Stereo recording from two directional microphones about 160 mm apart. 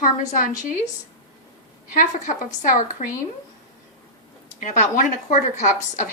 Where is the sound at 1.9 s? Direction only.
55° left (ahead or behind).